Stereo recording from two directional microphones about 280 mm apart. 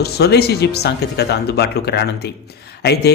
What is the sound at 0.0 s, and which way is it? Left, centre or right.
Speech, left.